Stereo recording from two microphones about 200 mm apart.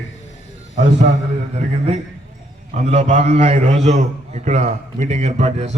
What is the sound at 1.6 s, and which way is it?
A man's voice, 35° right (ahead or behind).